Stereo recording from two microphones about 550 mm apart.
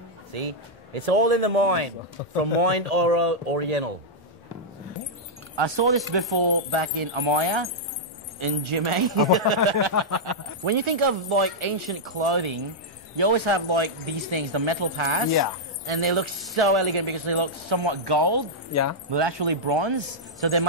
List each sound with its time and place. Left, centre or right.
0.3 s speech: right
5.6 s speech: right
10.6 s speech: right
18.7 s speech: left
19.0 s speech: right